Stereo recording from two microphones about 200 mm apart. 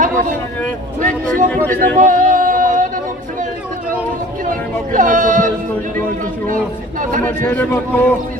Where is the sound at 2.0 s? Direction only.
40° right (ahead or behind).